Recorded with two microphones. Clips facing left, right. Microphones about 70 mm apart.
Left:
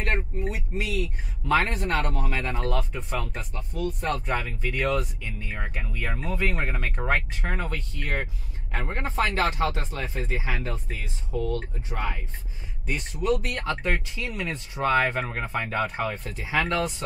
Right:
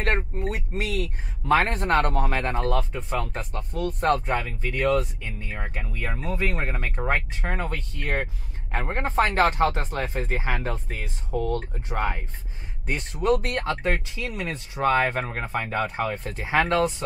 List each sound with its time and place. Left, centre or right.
0.0 s speech: right
3.5 s speech: right
4.8 s speech: right
5.5 s speech: centre
5.9 s speech: centre
6.6 s speech: centre
7.1 s speech: right
14.1 s speech: right
15.2 s speech: centre
15.7 s speech: right
16.3 s speech: right